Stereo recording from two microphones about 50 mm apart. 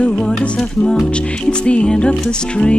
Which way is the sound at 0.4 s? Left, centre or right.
Centre.